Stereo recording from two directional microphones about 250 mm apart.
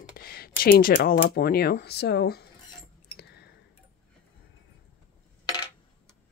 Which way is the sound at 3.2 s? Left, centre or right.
Left.